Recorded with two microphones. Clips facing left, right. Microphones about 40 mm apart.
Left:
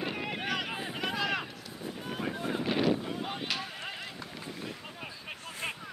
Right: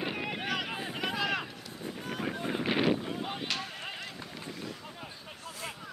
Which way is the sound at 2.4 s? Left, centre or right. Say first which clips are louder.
Even; centre.